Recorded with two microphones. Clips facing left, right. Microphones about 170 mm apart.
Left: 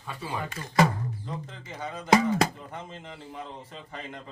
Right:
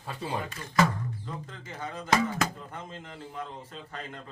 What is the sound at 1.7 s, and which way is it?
A man's voice, 10° left (ahead or behind).